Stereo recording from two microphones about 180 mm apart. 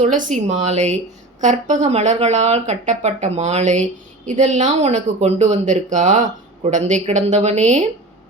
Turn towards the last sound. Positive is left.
turn(degrees=-40)  # may be behind; listen again after turning